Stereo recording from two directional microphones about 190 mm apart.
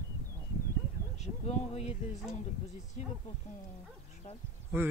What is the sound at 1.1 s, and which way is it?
Speech, 35° left (ahead or behind).